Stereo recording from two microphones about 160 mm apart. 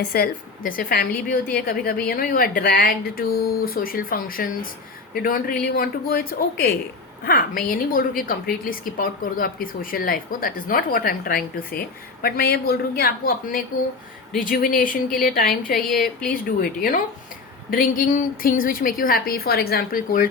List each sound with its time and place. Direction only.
0.1 s a woman's voice: 65° left (ahead or behind)